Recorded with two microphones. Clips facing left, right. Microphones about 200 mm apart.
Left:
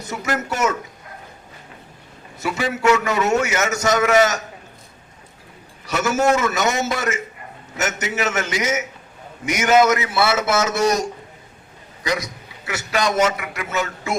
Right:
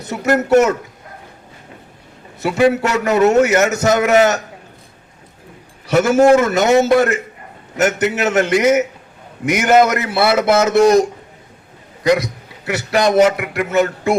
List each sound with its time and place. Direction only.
0.1 s a man's voice: 60° right (ahead or behind)
2.4 s a man's voice: 55° right (ahead or behind)
5.8 s a man's voice: 55° right (ahead or behind)
12.0 s a man's voice: 60° right (ahead or behind)